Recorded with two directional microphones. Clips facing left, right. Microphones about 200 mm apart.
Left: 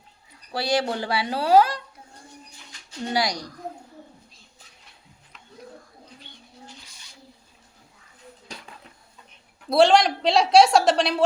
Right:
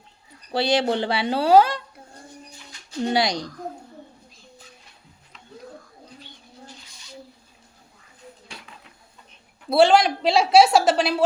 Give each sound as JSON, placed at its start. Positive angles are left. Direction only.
{"t": 0.5, "sound": "speech", "side_deg": -25}
{"t": 3.1, "sound": "speech", "side_deg": -25}
{"t": 8.5, "sound": "dishes", "side_deg": 40}
{"t": 9.6, "sound": "a woman's voice", "side_deg": 0}